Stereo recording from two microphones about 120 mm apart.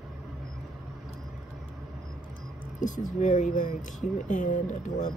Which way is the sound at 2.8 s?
90° left.